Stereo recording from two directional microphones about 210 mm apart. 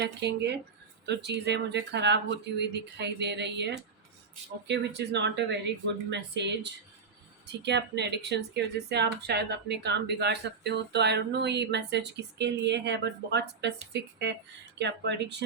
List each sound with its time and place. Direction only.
0.0 s speech: 50° right (ahead or behind)